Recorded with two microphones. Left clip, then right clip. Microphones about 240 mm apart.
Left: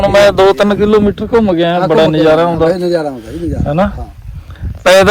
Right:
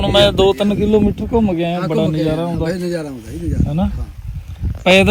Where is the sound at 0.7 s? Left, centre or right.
Centre.